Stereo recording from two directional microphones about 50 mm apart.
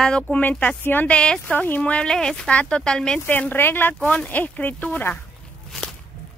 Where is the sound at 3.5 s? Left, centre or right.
Left.